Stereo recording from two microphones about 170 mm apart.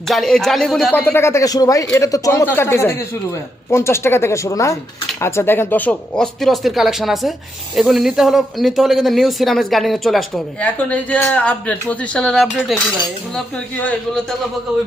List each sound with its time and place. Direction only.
0.1 s a man's voice: centre (ahead or behind)